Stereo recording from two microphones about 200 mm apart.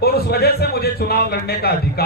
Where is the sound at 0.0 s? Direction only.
50° left (ahead or behind).